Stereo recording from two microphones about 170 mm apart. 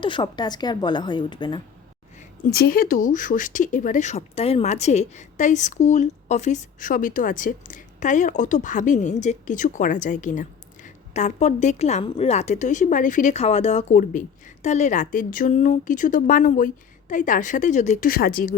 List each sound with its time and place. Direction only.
0.0 s a woman's voice: 25° left (ahead or behind)
2.1 s speech: 60° left (ahead or behind); by 18.1 s 45° left (ahead or behind)
18.1 s speech: 60° left (ahead or behind)